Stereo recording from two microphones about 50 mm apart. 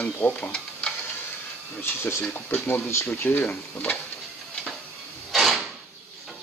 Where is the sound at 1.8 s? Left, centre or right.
Left.